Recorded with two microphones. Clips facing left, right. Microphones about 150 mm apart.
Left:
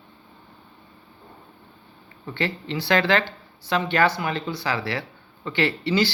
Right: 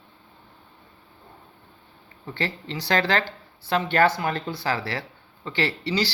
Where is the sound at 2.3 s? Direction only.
40° right (ahead or behind).